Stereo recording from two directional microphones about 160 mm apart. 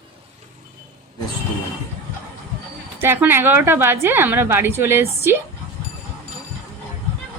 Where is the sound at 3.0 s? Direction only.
15° right (ahead or behind).